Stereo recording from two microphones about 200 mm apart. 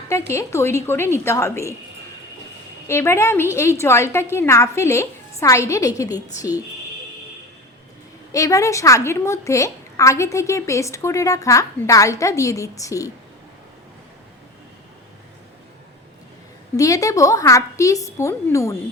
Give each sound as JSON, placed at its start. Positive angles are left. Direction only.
{"t": 0.1, "sound": "a woman's voice", "side_deg": 15}
{"t": 2.8, "sound": "a woman's voice", "side_deg": 15}
{"t": 8.3, "sound": "a woman's voice", "side_deg": 15}
{"t": 16.7, "sound": "a woman's voice", "side_deg": 15}